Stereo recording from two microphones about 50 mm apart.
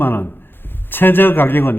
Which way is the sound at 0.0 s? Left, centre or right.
Left.